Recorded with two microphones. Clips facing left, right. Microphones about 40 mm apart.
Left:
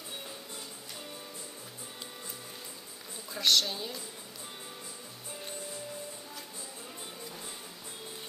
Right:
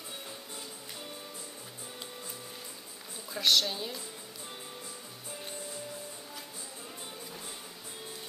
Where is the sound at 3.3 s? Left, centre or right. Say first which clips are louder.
Even; centre.